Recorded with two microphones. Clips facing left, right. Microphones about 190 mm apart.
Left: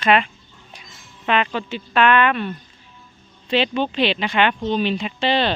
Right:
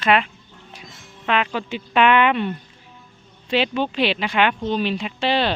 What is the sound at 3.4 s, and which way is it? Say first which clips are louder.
Speech: left 1 dB; 10° right (ahead or behind).